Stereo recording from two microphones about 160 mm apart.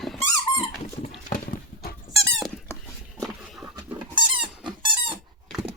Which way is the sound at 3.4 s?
5° right (ahead or behind).